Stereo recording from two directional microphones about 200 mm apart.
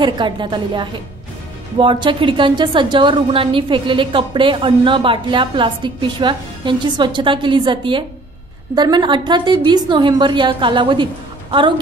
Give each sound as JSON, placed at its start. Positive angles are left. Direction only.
{"t": 0.0, "sound": "a woman's voice", "side_deg": -25}